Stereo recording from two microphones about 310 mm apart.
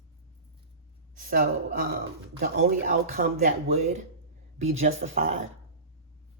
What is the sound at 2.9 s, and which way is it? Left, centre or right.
Speech, right.